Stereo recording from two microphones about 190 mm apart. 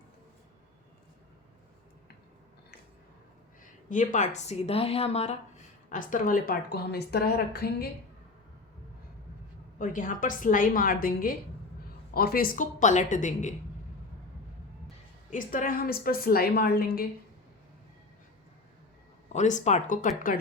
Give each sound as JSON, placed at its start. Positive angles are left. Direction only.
{"t": 3.8, "sound": "a woman's voice", "side_deg": 40}
{"t": 9.7, "sound": "a woman's voice", "side_deg": 45}
{"t": 15.3, "sound": "a woman's voice", "side_deg": 45}
{"t": 19.3, "sound": "a woman's voice", "side_deg": 40}